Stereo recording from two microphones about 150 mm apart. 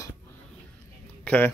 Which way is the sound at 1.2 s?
10° left (ahead or behind).